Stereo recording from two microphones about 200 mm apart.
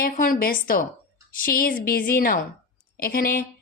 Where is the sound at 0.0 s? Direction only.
45° left (ahead or behind).